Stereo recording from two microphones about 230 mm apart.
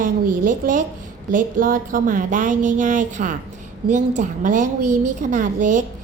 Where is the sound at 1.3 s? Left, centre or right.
Right.